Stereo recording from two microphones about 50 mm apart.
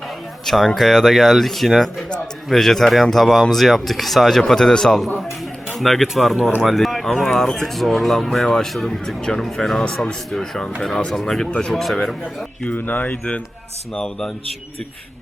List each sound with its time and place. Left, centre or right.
0.4 s speech: centre
4.9 s speech: centre
12.7 s speech: left
13.9 s speech: centre